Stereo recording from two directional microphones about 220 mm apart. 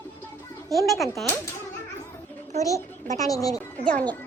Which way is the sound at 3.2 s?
15° left (ahead or behind).